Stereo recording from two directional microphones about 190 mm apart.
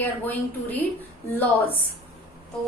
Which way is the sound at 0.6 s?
35° left (ahead or behind).